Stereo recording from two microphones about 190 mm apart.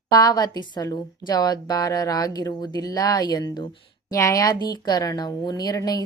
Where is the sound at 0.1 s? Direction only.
20° left (ahead or behind).